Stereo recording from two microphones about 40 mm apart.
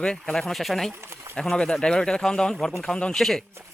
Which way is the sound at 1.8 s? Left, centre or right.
Centre.